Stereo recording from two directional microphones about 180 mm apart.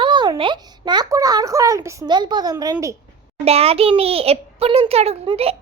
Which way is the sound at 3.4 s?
35° right (ahead or behind).